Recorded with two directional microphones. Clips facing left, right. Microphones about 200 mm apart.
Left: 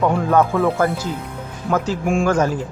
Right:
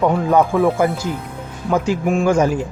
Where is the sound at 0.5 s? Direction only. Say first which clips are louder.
Right 3 dB; 15° right (ahead or behind).